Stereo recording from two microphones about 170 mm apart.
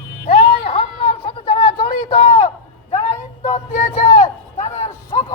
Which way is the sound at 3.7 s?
55° left (ahead or behind).